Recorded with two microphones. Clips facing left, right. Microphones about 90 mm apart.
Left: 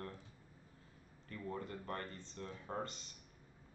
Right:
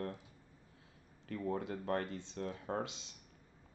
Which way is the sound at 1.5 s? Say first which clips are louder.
Right 6 dB; 85° right.